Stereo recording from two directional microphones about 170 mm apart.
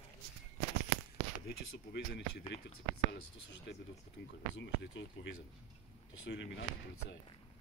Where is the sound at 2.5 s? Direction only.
80° left.